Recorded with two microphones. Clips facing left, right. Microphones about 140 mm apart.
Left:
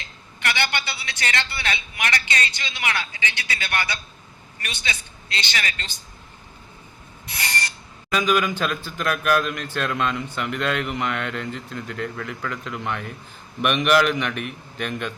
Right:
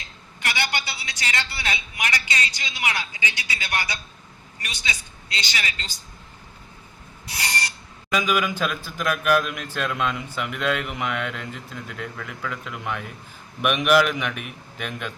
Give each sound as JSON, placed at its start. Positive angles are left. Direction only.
{"t": 0.3, "sound": "a sound", "side_deg": 60}
{"t": 2.6, "sound": "a woman's voice", "side_deg": 55}
{"t": 8.1, "sound": "a man's voice", "side_deg": -10}